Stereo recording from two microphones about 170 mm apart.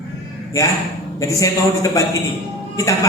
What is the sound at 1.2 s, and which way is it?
Music, 20° left (ahead or behind).